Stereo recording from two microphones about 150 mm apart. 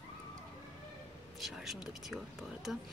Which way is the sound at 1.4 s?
Centre (ahead or behind).